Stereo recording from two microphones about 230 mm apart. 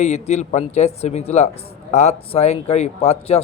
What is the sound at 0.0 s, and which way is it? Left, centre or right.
Speech, left.